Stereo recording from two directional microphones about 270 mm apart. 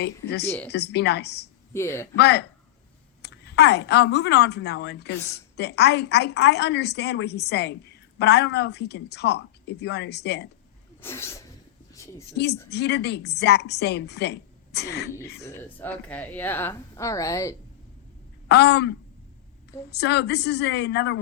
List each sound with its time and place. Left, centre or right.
0.0 s a woman's voice: left
0.4 s a woman's voice: centre
0.7 s a woman's voice: left
1.7 s a woman's voice: centre
2.1 s a woman's voice: left
11.0 s a woman's voice: centre
12.7 s a woman's voice: left
15.4 s a woman's voice: centre
18.4 s a woman's voice: left